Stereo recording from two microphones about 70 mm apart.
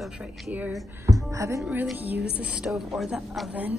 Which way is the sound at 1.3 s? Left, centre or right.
Right.